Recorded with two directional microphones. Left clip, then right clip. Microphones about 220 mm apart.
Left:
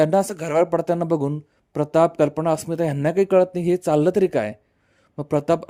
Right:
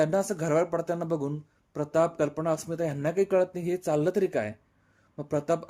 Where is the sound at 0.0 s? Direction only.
40° left (ahead or behind).